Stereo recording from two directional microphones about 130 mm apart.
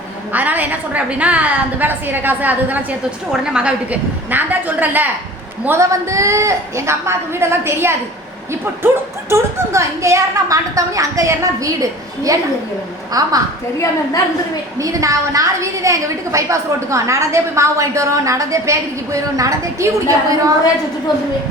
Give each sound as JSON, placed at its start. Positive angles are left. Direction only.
{"t": 0.3, "sound": "a woman's voice", "side_deg": -15}
{"t": 9.3, "sound": "a woman's voice", "side_deg": -20}
{"t": 14.8, "sound": "a woman's voice", "side_deg": -25}